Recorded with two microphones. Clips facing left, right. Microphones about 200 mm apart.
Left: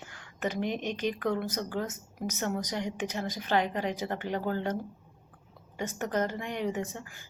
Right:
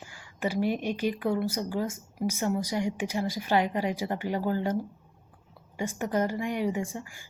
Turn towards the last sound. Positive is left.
turn(degrees=-10)  # may be behind; listen again after turning